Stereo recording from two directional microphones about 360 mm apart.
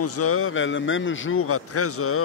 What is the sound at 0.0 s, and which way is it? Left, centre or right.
Speech, left.